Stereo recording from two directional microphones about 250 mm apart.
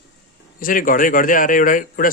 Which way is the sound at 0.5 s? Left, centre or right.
Left.